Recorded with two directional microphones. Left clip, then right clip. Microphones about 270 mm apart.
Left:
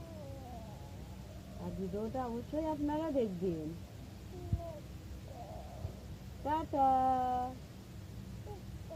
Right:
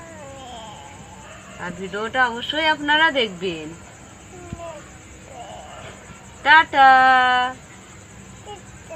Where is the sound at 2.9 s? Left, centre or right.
Centre.